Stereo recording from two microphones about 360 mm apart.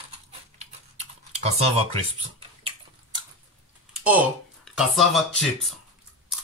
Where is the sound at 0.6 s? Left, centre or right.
Centre.